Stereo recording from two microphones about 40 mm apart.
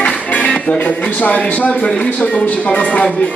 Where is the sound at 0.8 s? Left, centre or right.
Left.